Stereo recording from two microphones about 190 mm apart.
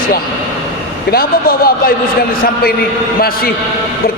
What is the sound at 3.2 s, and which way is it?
Speech, 50° left (ahead or behind).